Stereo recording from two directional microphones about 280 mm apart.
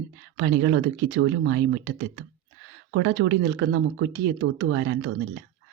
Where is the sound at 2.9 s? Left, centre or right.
Right.